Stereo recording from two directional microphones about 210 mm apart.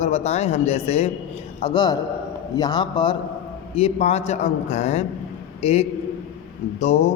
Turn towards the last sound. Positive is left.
turn(degrees=30)  # may be behind; listen again after turning